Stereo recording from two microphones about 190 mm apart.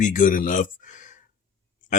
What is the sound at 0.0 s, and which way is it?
Speech, 40° left (ahead or behind).